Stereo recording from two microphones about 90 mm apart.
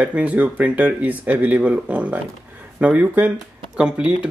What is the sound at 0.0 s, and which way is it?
Speech, 15° right (ahead or behind).